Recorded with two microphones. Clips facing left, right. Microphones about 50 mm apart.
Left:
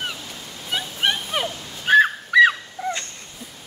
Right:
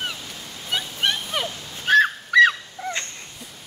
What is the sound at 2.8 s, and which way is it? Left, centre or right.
Cat, centre.